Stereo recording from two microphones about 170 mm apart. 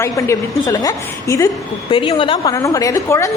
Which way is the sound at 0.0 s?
15° left (ahead or behind).